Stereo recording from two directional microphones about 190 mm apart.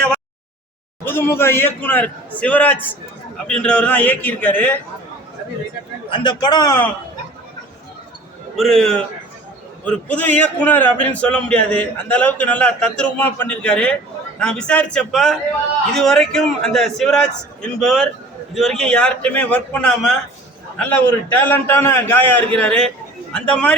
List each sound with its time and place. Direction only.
1.0 s a man's voice: 10° left (ahead or behind)
6.1 s a man's voice: 25° left (ahead or behind)
8.5 s a man's voice: centre (ahead or behind)